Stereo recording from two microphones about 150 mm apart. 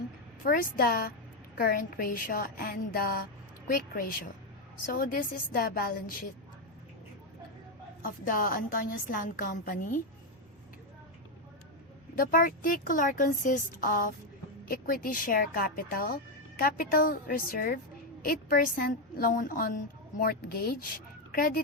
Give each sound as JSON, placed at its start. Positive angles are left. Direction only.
{"t": 0.4, "sound": "speech", "side_deg": 70}
{"t": 8.0, "sound": "speech", "side_deg": 70}
{"t": 12.1, "sound": "speech", "side_deg": 65}
{"t": 20.1, "sound": "speech", "side_deg": 85}